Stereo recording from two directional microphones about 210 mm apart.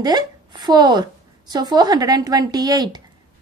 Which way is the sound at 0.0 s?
20° right (ahead or behind).